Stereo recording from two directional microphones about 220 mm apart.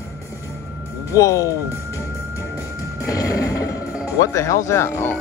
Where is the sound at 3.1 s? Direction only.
15° left (ahead or behind).